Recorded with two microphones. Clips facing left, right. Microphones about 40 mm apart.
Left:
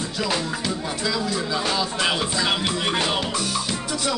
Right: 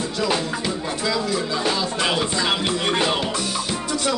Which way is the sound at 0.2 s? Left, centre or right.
Centre.